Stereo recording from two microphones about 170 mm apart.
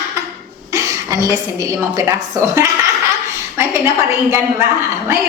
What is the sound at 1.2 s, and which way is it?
Speech, 20° right (ahead or behind).